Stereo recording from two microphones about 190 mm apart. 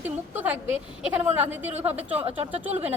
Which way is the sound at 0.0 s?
10° right (ahead or behind).